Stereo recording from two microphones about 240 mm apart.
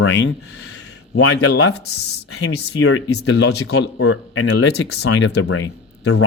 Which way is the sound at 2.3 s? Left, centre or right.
Left.